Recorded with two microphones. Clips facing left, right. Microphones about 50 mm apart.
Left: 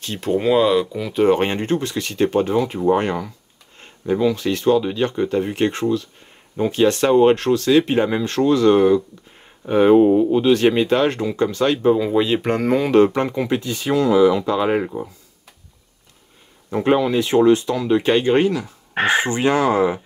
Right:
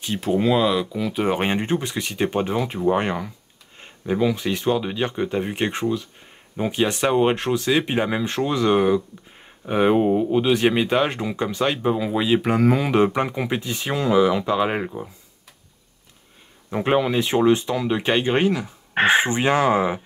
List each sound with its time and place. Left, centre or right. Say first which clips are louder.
0.0 s speech: left 1 dB; centre
16.7 s speech: left 3 dB; centre